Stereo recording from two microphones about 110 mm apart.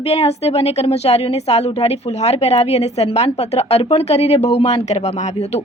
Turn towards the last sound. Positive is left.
turn(degrees=80)